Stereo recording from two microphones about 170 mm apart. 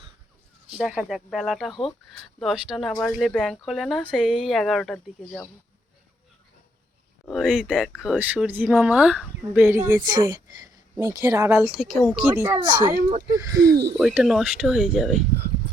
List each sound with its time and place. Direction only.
0.7 s speech: 5° right (ahead or behind)
7.3 s speech: centre (ahead or behind)
10.0 s a woman's voice: 25° right (ahead or behind)
13.6 s speech: 80° right
13.9 s speech: 5° right (ahead or behind)